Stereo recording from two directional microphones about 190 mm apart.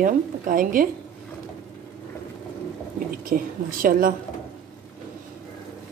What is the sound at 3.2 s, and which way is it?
Speech, 45° right (ahead or behind).